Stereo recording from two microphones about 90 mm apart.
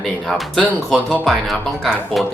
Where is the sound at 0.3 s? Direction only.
Centre (ahead or behind).